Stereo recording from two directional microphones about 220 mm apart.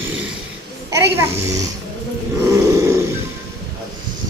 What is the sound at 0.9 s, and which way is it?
Speech, 15° right (ahead or behind).